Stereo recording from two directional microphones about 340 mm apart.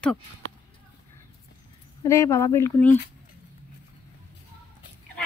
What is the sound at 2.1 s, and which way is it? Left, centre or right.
Speech, centre.